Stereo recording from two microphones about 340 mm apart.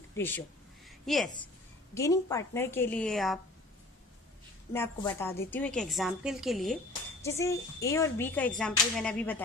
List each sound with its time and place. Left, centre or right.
0.2 s a woman's voice: centre
0.8 s a sound: centre
2.0 s a woman's voice: centre
4.7 s speech: centre